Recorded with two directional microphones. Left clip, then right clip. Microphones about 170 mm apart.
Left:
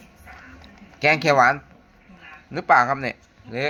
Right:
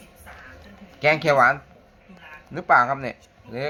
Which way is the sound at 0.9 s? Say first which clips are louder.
Left 1 dB; 20° left (ahead or behind).